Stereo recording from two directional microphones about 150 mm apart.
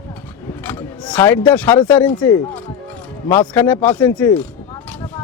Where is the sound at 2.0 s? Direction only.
10° left (ahead or behind).